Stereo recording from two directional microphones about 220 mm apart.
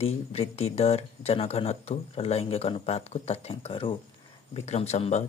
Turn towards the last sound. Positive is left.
turn(degrees=30)  # may be behind; listen again after turning